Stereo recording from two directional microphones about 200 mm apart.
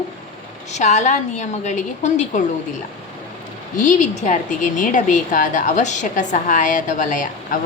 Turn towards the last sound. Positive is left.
turn(degrees=40)  # may be behind; listen again after turning